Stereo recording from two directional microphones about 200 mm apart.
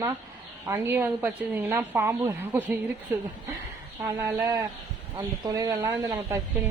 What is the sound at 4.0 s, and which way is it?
A woman's voice, 10° right (ahead or behind).